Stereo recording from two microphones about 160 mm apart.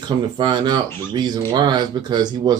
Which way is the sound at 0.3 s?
30° right (ahead or behind).